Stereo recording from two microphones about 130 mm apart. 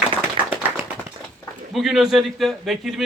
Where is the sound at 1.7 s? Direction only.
Centre (ahead or behind).